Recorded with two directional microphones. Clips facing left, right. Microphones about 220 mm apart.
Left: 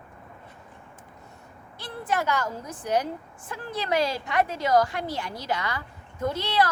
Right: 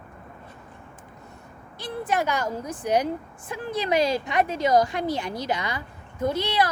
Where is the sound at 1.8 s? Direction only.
15° right (ahead or behind).